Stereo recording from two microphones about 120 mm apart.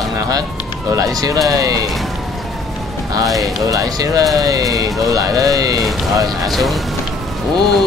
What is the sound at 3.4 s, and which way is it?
Speech, 30° right (ahead or behind).